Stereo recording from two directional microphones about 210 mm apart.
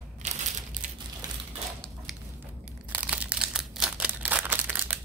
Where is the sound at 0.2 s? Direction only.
35° right (ahead or behind).